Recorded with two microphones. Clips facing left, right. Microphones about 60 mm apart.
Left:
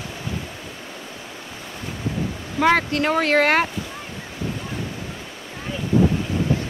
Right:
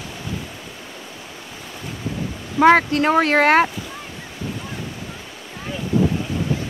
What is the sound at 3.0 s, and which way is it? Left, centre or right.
Speech, right.